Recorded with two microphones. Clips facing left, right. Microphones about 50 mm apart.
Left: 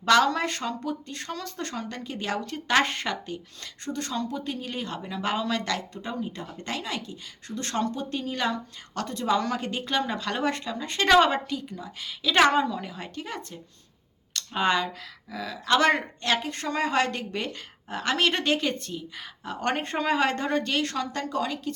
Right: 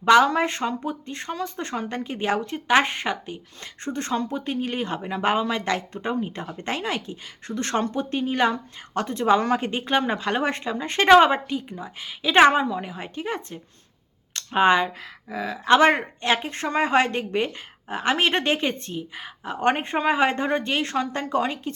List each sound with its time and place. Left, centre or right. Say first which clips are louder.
0.0 s speech: right 4 dB; centre
3.8 s speech: right 4 dB; right